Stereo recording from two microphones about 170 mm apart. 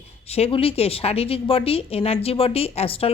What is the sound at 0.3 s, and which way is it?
Speech, 35° left (ahead or behind).